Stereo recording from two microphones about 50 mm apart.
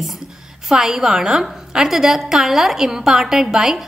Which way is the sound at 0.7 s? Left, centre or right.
Centre.